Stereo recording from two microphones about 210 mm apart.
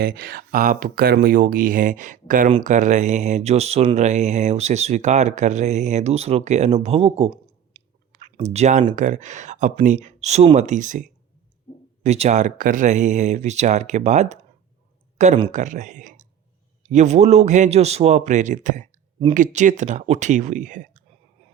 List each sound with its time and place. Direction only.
0.0 s speech: 45° right (ahead or behind)